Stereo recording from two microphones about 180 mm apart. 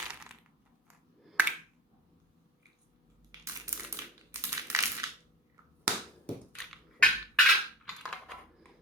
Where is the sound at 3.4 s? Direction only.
15° right (ahead or behind).